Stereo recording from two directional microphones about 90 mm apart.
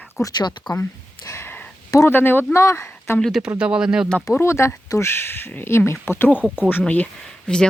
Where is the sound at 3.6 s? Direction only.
10° right (ahead or behind).